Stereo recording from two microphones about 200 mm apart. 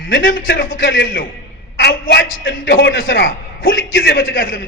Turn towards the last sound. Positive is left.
turn(degrees=70)  # may be behind; listen again after turning